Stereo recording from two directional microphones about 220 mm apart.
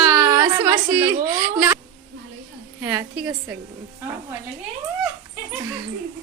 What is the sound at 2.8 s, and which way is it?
Speech, 10° right (ahead or behind).